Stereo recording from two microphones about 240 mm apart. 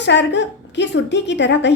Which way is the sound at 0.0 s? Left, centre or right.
Left.